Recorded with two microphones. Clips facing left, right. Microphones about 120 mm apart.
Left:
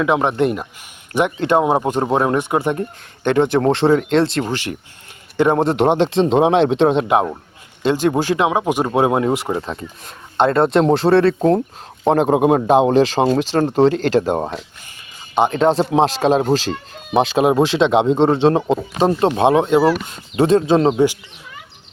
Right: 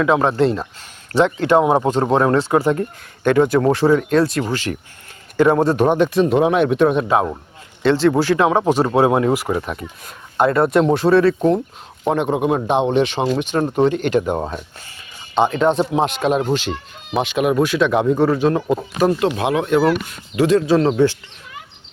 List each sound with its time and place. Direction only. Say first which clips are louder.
0.0 s speech: right 1 dB; 20° left (ahead or behind); by 12.3 s 35° left (ahead or behind)
12.4 s a man's voice: left 4 dB; 45° left (ahead or behind)
15.5 s speech: left 2 dB; 35° left (ahead or behind); by 21.2 s 15° left (ahead or behind)